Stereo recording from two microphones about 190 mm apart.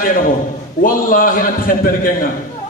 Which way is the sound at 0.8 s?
45° left (ahead or behind).